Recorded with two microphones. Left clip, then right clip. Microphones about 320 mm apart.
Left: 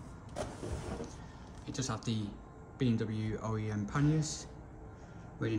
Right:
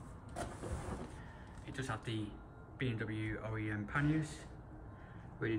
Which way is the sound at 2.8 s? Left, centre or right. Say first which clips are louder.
Left 5 dB; centre.